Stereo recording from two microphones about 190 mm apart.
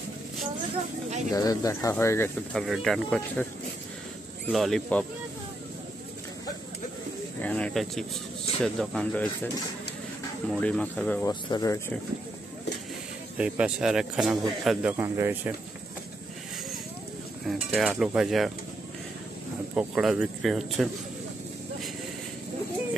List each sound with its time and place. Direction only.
1.3 s speech: 20° left (ahead or behind)
2.6 s speech: centre (ahead or behind)
4.5 s speech: centre (ahead or behind)
7.4 s speech: 5° left (ahead or behind)
10.5 s speech: 5° left (ahead or behind)
13.4 s speech: 5° right (ahead or behind)
17.5 s speech: centre (ahead or behind)
19.7 s speech: 5° right (ahead or behind)